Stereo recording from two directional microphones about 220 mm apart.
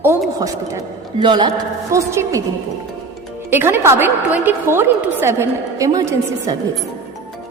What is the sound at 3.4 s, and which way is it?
A woman's voice, 10° right (ahead or behind).